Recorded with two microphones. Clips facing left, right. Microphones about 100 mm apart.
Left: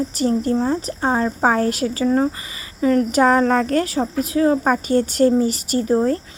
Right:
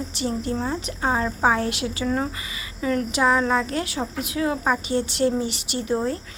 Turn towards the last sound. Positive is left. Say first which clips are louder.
# left 7 dB
turn(degrees=40)  # may be behind; listen again after turning